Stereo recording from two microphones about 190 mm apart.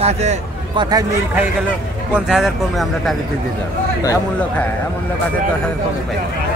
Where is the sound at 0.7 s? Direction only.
20° right (ahead or behind).